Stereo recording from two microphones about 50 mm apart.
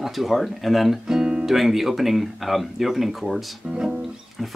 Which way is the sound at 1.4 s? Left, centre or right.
Centre.